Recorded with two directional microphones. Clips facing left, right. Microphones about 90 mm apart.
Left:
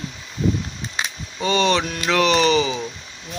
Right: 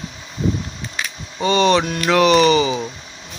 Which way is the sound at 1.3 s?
Centre (ahead or behind).